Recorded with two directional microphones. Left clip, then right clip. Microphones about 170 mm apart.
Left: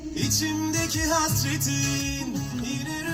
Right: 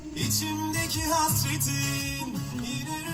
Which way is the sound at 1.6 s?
20° right (ahead or behind).